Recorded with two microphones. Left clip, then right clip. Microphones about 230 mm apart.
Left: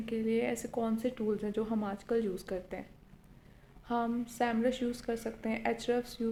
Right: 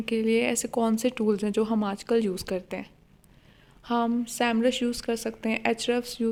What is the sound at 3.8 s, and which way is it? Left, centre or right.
A woman's voice, right.